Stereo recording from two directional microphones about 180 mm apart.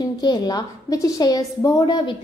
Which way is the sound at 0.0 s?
25° left (ahead or behind).